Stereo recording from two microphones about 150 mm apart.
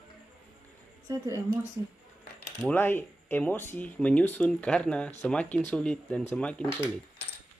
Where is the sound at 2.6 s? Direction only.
15° left (ahead or behind).